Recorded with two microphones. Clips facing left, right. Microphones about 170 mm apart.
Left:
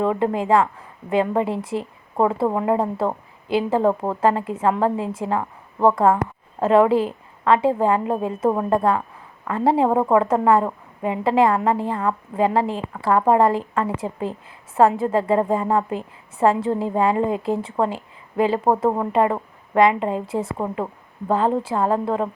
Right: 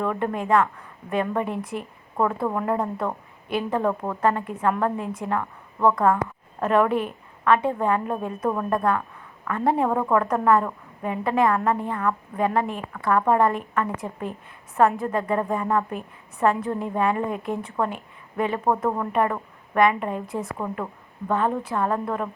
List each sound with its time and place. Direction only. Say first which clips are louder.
0.0 s a woman's voice: left 5 dB; 25° left (ahead or behind)